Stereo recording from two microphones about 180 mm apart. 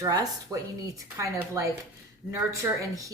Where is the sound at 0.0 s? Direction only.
20° right (ahead or behind).